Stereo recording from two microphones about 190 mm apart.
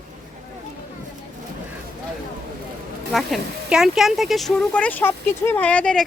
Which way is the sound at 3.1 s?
Centre (ahead or behind).